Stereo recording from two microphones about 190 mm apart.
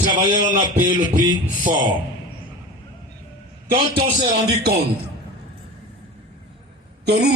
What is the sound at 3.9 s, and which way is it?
Music, 55° right (ahead or behind).